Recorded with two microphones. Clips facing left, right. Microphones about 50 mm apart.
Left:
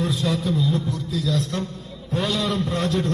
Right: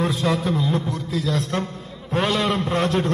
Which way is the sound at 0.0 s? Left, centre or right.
Right.